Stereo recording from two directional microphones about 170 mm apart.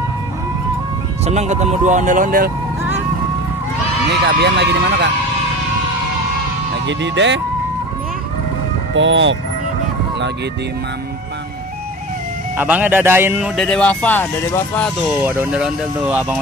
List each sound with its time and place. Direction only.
1.2 s speech: 40° right (ahead or behind)
4.3 s speech: 90° right
6.9 s speech: 90° right
8.9 s speech: 90° right
12.5 s speech: 10° right (ahead or behind)
13.6 s speech: 5° left (ahead or behind)
15.2 s speech: 10° right (ahead or behind)